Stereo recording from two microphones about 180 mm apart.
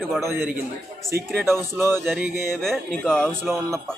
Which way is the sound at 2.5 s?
Centre (ahead or behind).